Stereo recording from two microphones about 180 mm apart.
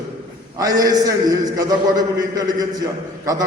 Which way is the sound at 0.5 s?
20° right (ahead or behind).